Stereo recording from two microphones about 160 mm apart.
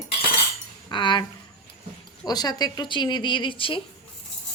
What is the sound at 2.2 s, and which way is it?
Dishes, 25° left (ahead or behind).